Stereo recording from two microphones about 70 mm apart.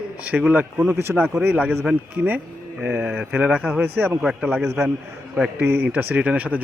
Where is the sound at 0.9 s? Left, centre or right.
Right.